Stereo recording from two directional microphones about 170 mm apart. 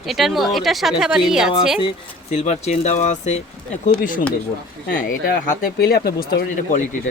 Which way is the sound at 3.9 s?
55° left (ahead or behind).